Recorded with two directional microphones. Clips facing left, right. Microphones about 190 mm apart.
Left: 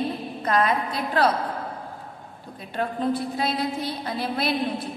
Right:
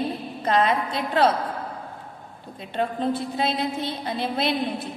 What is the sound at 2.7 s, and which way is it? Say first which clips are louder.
A woman's voice: even; 25° right (ahead or behind).